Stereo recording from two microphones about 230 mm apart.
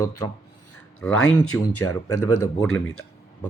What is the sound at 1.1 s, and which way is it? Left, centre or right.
Speech, left.